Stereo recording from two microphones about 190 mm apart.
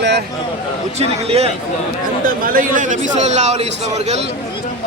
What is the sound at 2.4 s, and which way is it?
A man's voice, 50° right (ahead or behind).